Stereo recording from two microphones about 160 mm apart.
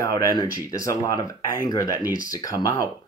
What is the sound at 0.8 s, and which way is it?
Speech, 20° left (ahead or behind).